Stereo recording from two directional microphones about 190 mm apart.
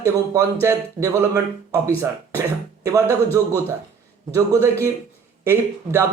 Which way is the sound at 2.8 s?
15° right (ahead or behind).